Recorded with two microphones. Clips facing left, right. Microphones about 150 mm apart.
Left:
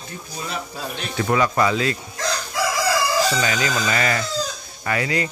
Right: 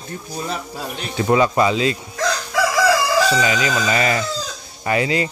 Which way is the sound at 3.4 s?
20° right (ahead or behind).